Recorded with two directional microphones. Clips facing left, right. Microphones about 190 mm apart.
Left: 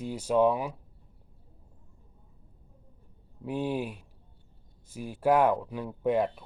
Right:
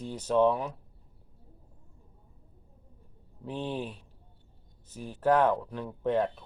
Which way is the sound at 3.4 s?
10° left (ahead or behind).